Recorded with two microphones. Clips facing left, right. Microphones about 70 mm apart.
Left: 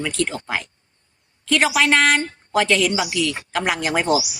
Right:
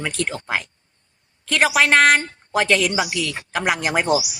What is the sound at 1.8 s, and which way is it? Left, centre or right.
Speech, right.